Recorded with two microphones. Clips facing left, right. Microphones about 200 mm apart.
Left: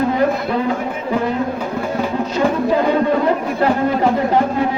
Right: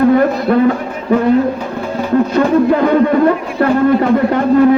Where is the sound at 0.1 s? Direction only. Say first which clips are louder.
Right 6 dB; 55° right (ahead or behind).